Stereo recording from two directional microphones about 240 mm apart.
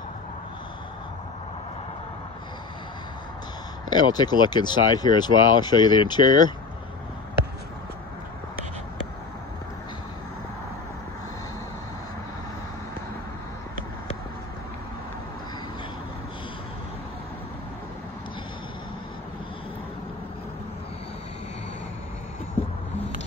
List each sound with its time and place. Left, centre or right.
3.9 s speech: centre